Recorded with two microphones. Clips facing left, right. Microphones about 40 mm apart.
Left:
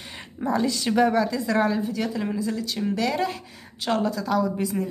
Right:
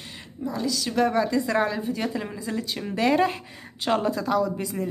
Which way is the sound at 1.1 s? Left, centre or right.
Centre.